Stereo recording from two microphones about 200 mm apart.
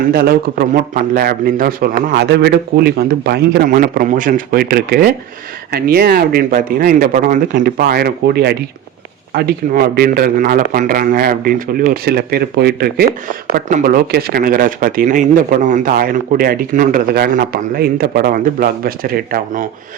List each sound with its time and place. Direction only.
0.1 s speech: 50° right (ahead or behind)